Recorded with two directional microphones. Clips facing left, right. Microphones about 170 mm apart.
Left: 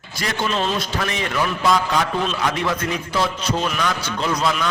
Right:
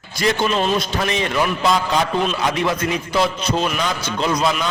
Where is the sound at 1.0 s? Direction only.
25° right (ahead or behind).